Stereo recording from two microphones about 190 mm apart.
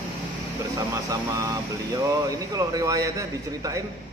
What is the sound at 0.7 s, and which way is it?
A man's voice, 20° right (ahead or behind).